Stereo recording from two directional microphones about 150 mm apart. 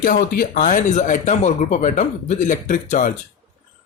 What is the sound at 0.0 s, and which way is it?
Speech, 75° left (ahead or behind).